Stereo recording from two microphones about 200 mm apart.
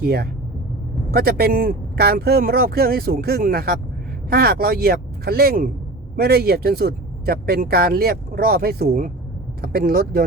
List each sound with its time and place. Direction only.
0.0 s speech: 50° right (ahead or behind)